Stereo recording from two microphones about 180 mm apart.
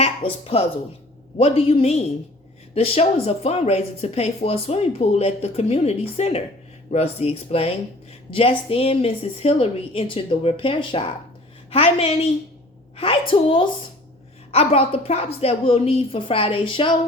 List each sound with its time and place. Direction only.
0.0 s a woman's voice: 35° left (ahead or behind)